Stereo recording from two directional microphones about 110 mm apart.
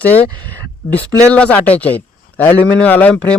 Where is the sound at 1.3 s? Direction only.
15° left (ahead or behind).